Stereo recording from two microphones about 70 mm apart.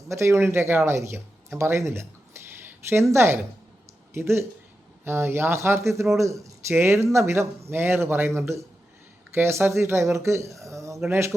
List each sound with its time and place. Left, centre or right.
0.1 s a woman's voice: right
6.7 s speech: right
10.6 s a sound: right